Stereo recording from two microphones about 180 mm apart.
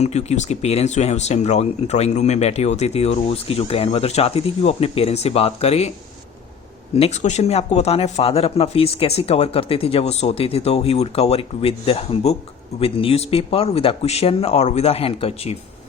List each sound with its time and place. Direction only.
0.0 s speech: 35° left (ahead or behind)
6.9 s speech: 35° left (ahead or behind)